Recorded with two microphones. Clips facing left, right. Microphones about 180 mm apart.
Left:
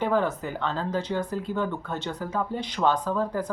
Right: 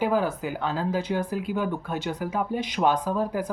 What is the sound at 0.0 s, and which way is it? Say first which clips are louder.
Speech: right 1 dB; 10° right (ahead or behind).